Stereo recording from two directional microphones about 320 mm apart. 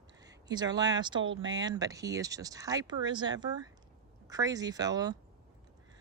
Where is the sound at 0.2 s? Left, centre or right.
Centre.